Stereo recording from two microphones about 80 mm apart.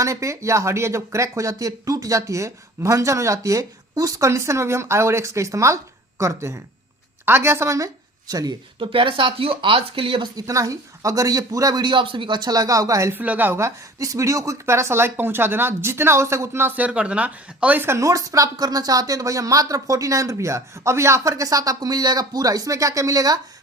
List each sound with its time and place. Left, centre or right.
0.0 s speech: right
8.3 s speech: right
8.8 s speech: right
10.3 s speech: right
13.1 s speech: right
13.6 s speech: right
16.7 s speech: centre
17.8 s speech: right